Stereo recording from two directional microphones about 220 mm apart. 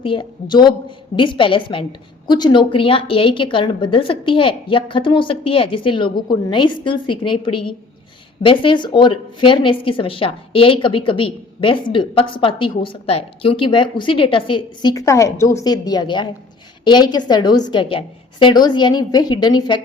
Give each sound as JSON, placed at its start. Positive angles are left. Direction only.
{"t": 0.0, "sound": "a woman's voice", "side_deg": 20}